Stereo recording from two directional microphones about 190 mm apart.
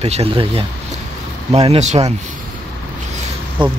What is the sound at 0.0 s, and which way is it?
Speech, 30° right (ahead or behind).